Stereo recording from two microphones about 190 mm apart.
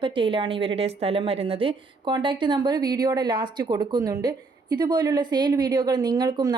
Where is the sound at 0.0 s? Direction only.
25° right (ahead or behind).